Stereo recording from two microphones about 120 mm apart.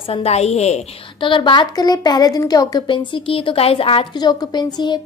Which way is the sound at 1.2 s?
45° left (ahead or behind).